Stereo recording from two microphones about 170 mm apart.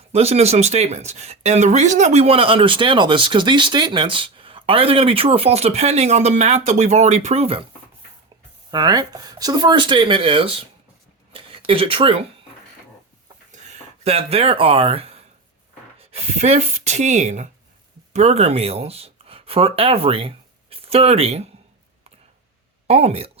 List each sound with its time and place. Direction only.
0.1 s speech: 35° right (ahead or behind)
8.7 s speech: 25° right (ahead or behind)
11.3 s a sound: 30° right (ahead or behind)
13.5 s speech: 40° right (ahead or behind)
22.9 s speech: 35° right (ahead or behind)